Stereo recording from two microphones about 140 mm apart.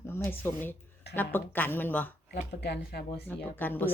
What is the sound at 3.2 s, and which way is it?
Speech, 10° left (ahead or behind).